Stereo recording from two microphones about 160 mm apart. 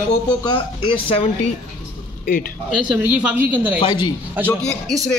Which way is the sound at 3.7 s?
30° left (ahead or behind).